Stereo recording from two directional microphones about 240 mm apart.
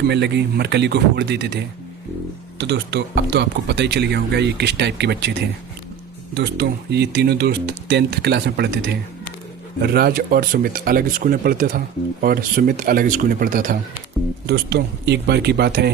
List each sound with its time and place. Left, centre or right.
0.1 s speech: right